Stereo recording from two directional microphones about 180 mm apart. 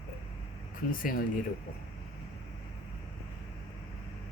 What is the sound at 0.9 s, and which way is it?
Speech, 50° left (ahead or behind).